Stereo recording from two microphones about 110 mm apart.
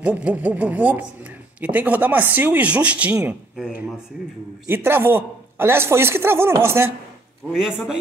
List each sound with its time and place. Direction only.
0.0 s speech: 15° right (ahead or behind)
4.6 s a man's voice: 20° right (ahead or behind)
7.5 s speech: 5° right (ahead or behind)